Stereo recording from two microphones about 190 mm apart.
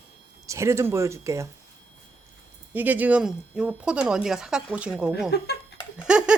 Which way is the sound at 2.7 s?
10° right (ahead or behind).